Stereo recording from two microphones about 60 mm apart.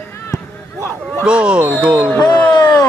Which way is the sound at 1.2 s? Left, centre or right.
Centre.